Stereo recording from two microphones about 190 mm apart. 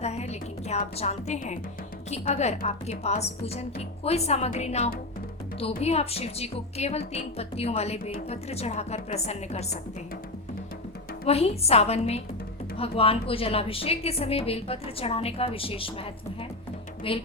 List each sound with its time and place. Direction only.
0.0 s music: 35° left (ahead or behind)
0.9 s a woman's voice: 35° left (ahead or behind)
11.3 s a woman's voice: 30° left (ahead or behind)
17.1 s a woman's voice: 30° left (ahead or behind)